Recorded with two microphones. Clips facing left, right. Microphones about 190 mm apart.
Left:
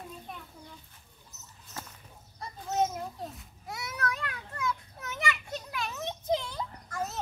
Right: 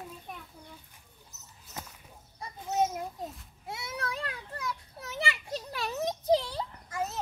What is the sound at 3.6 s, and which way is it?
Children playing, 30° right (ahead or behind).